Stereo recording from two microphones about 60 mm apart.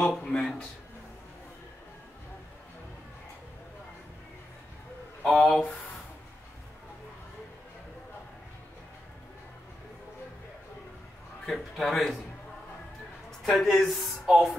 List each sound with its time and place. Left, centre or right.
0.0 s speech: centre
5.2 s a man's voice: centre
11.4 s a man's voice: centre
13.4 s a man's voice: centre